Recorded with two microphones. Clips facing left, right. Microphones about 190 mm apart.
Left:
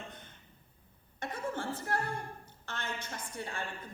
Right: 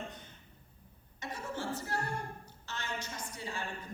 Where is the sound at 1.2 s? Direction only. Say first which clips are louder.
Left 2 dB; 55° left (ahead or behind).